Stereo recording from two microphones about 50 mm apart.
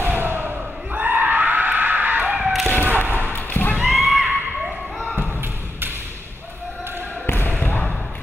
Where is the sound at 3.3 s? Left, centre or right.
Left.